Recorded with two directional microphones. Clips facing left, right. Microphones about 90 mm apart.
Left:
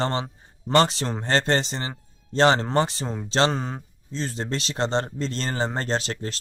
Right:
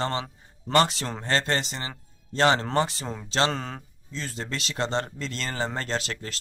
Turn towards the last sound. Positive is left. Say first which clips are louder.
# left 4 dB
turn(degrees=30)  # may be behind; listen again after turning